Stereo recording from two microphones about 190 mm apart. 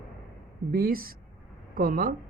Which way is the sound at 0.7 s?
50° right (ahead or behind).